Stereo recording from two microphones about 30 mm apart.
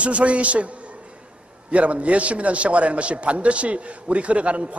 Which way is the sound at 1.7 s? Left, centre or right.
Right.